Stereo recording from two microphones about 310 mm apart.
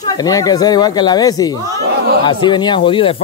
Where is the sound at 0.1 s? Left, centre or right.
Centre.